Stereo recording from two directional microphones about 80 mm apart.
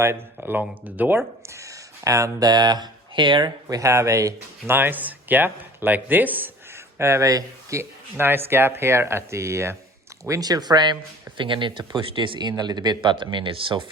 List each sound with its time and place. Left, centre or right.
0.6 s speech: right
2.5 s speech: right
3.7 s speech: right
4.7 s speech: right
10.2 s speech: right
11.3 s speech: right